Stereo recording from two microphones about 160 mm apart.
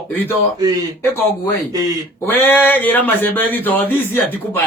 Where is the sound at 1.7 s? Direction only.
25° right (ahead or behind).